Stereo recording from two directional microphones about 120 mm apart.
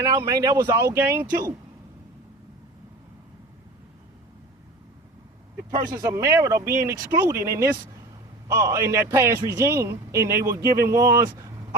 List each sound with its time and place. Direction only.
0.0 s a man's voice: 25° right (ahead or behind)
5.7 s a man's voice: 35° right (ahead or behind)